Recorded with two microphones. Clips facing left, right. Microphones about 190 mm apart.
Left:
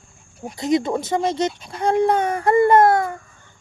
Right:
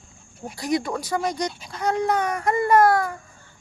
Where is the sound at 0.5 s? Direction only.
20° left (ahead or behind).